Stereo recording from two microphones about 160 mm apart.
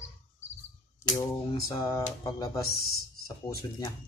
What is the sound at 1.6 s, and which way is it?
Speech, 20° left (ahead or behind).